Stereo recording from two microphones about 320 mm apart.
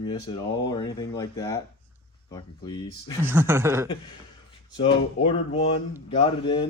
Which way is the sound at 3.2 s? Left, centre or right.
Centre.